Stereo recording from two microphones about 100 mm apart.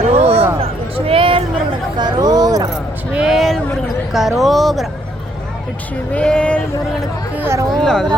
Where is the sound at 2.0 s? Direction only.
45° right (ahead or behind).